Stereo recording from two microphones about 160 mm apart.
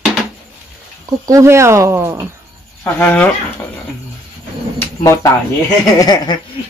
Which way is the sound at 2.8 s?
10° left (ahead or behind).